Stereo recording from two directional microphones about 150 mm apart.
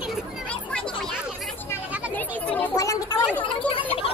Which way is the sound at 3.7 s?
35° left (ahead or behind).